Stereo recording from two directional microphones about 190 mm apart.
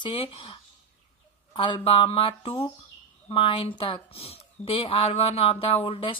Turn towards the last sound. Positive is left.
turn(degrees=25)  # may be behind; listen again after turning